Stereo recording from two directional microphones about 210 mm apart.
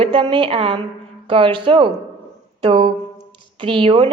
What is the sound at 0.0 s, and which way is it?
A woman's voice, 25° right (ahead or behind).